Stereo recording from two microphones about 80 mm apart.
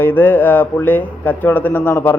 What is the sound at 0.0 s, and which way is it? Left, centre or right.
Speech, left.